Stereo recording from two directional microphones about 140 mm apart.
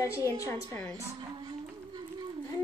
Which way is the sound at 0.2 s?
20° right (ahead or behind).